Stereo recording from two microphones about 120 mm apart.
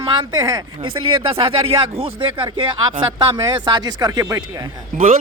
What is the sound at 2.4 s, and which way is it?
Speech, 40° right (ahead or behind).